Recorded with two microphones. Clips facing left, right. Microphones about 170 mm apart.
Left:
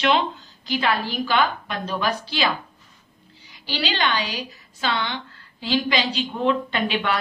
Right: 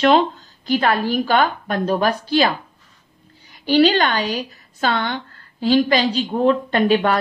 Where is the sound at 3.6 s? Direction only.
50° right (ahead or behind).